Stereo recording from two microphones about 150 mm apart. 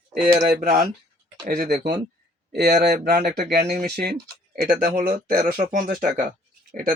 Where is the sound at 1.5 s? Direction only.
90° right.